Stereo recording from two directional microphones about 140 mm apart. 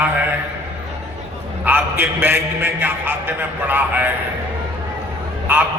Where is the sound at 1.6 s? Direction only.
15° right (ahead or behind).